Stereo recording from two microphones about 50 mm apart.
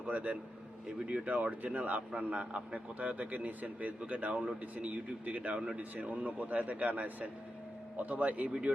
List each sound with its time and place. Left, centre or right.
0.0 s speech: right